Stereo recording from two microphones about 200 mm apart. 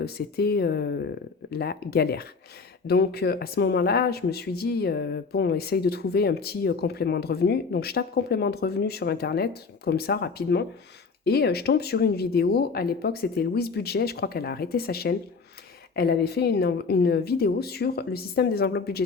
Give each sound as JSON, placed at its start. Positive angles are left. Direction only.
{"t": 0.0, "sound": "speech", "side_deg": 50}